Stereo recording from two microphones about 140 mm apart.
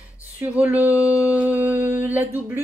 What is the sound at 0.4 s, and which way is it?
Speech, 10° right (ahead or behind).